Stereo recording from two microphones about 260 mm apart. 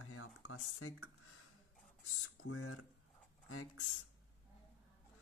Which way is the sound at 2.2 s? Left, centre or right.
Left.